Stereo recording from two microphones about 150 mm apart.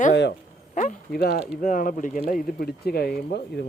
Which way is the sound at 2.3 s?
75° left (ahead or behind).